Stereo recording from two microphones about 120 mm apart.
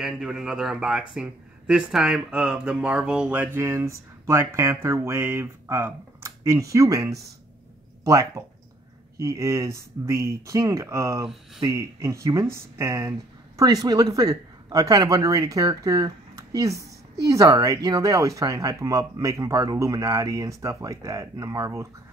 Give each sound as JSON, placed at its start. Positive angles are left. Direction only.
{"t": 0.0, "sound": "speech", "side_deg": -5}